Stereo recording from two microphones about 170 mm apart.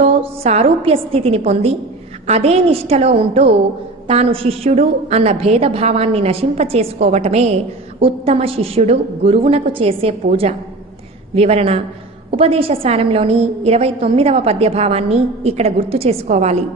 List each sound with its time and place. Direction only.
0.0 s a woman's voice: 35° right (ahead or behind)